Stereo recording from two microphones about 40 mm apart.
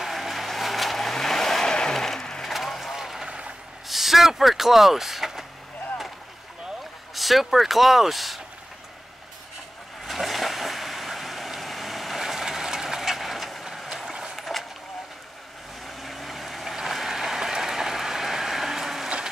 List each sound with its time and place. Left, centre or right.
0.0 s vehicle: centre
2.0 s vehicle: centre
3.3 s a sound: right
3.8 s vehicle: centre
7.2 s speech: centre
10.0 s vehicle: centre
13.8 s a sound: centre
14.3 s skateboard: centre
16.0 s vehicle: centre
16.7 s a sound: centre